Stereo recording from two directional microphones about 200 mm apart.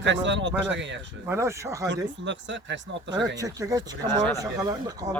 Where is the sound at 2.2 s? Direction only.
65° right (ahead or behind).